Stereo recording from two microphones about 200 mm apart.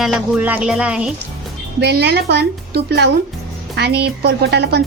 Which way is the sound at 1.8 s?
55° right (ahead or behind).